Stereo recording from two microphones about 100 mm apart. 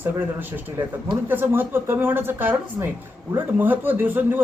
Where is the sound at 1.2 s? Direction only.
20° right (ahead or behind).